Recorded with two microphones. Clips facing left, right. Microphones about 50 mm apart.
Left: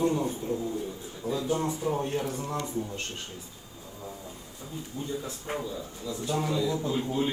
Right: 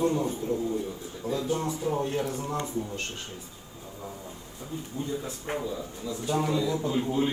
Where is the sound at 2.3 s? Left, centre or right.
Right.